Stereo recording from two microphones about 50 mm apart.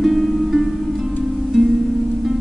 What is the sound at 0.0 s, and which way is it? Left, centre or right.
Music, centre.